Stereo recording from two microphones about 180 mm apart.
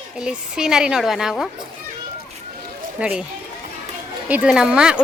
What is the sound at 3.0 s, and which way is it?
Speech, 5° right (ahead or behind).